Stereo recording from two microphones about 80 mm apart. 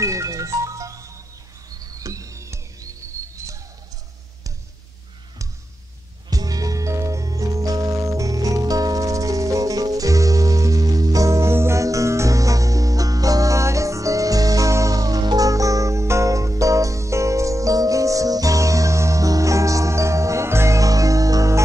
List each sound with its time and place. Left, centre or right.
0.0 s music: right
6.3 s music: right